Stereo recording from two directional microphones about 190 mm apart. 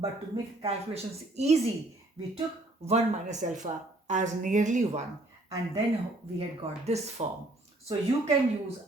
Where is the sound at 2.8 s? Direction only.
35° right (ahead or behind).